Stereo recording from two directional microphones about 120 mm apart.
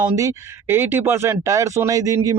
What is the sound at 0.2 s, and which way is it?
Speech, 20° right (ahead or behind).